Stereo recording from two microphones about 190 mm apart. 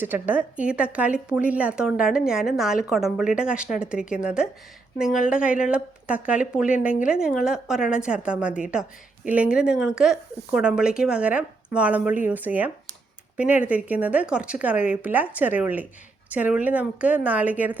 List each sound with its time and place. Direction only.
0.0 s a woman's voice: 10° right (ahead or behind)